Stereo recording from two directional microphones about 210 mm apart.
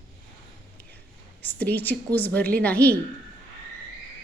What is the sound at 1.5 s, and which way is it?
A woman's voice, 10° left (ahead or behind).